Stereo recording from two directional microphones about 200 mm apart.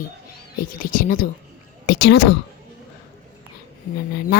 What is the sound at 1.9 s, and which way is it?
Speech, 55° left (ahead or behind).